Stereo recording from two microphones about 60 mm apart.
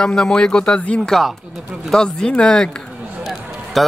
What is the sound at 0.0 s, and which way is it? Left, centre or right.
Speech, centre.